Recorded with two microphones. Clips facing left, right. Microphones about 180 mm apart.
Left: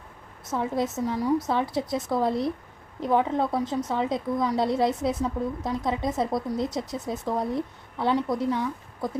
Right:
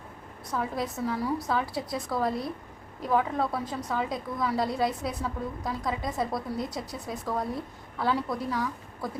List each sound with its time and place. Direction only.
0.5 s a woman's voice: 25° left (ahead or behind)